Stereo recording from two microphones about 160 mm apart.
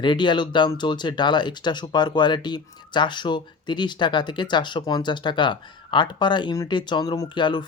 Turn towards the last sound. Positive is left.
turn(degrees=30)  # may be behind; listen again after turning